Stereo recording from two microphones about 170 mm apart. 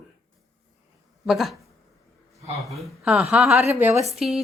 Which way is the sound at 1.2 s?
Centre (ahead or behind).